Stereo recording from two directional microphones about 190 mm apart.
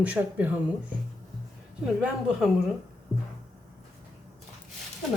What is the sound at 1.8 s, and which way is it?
Speech, 5° right (ahead or behind).